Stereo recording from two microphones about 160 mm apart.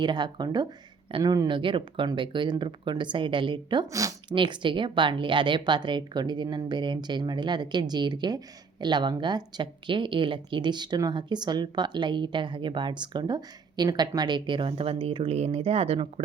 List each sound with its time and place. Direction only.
0.0 s speech: 25° right (ahead or behind)